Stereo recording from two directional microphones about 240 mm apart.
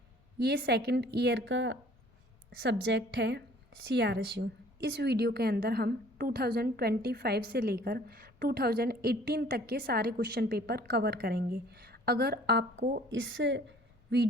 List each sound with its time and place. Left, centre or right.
0.3 s a woman's voice: right
12.7 s a woman's voice: right
13.1 s a woman's voice: right